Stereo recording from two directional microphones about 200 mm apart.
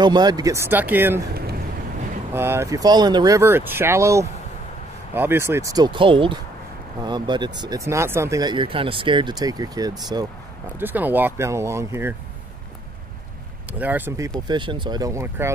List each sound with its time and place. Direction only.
0.0 s speech: 20° right (ahead or behind)
2.3 s speech: 10° right (ahead or behind)
10.8 s speech: 10° right (ahead or behind)
13.7 s speech: 10° right (ahead or behind)
14.5 s speech: 25° right (ahead or behind)